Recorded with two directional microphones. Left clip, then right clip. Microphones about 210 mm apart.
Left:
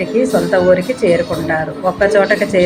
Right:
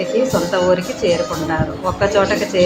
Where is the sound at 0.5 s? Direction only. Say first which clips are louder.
Left 4 dB; 10° left (ahead or behind).